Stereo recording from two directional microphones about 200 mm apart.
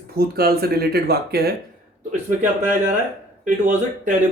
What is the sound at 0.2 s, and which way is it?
Speech, 50° right (ahead or behind).